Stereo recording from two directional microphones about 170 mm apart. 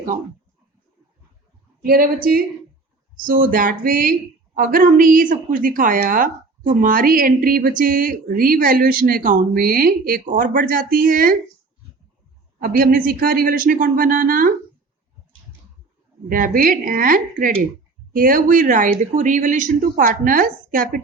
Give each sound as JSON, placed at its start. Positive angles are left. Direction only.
{"t": 1.8, "sound": "a woman's voice", "side_deg": -55}
{"t": 12.5, "sound": "a woman's voice", "side_deg": -55}
{"t": 16.3, "sound": "a woman's voice", "side_deg": -55}